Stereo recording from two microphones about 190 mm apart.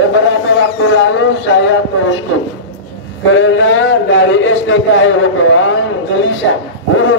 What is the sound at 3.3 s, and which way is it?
A man's voice, 90° left.